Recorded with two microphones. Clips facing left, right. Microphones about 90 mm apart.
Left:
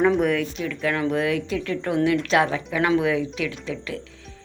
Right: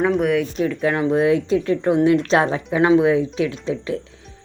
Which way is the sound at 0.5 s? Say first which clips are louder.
Right 5 dB; 35° right (ahead or behind).